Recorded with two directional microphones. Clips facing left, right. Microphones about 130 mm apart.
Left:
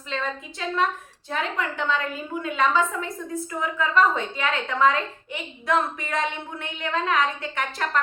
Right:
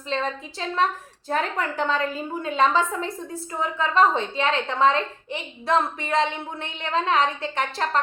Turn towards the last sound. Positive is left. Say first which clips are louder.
# right 2 dB
turn(degrees=-30)  # may be behind; listen again after turning